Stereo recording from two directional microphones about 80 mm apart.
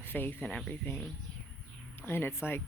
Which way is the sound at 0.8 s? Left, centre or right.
Left.